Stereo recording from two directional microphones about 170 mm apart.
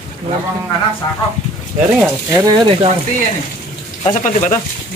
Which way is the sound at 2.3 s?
25° right (ahead or behind).